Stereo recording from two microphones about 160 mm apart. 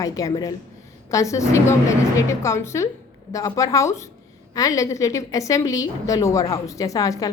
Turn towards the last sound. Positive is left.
turn(degrees=20)  # may be behind; listen again after turning